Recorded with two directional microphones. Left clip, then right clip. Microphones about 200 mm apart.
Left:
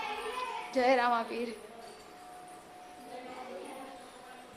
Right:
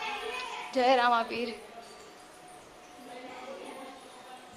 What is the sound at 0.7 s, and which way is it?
Speech, centre (ahead or behind).